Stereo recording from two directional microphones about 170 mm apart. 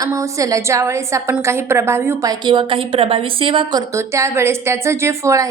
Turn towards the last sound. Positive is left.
turn(degrees=-15)  # may be behind; listen again after turning